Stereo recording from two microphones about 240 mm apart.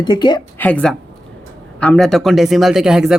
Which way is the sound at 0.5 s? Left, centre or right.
Centre.